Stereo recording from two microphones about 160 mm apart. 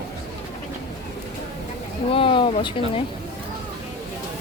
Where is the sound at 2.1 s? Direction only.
35° left (ahead or behind).